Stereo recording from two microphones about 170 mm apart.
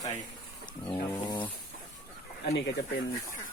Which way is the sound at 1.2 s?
25° left (ahead or behind).